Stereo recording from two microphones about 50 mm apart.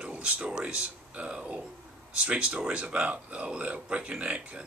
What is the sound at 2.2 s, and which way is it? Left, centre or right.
Speech, right.